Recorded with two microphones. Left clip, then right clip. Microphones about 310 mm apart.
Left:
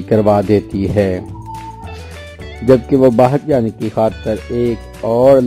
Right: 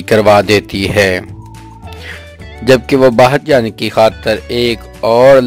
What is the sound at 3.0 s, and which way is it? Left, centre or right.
Speech, right.